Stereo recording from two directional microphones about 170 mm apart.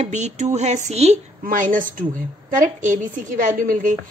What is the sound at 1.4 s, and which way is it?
A woman's voice, 50° right (ahead or behind).